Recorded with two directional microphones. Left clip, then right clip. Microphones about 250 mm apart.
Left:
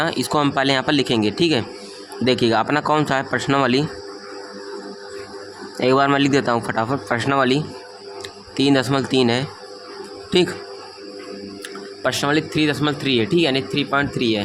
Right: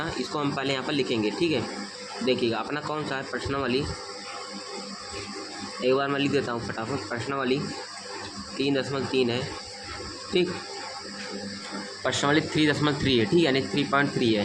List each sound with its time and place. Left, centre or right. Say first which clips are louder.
0.0 s speech: left 10 dB; left
5.8 s speech: left 8 dB; left
12.0 s speech: left 5 dB; left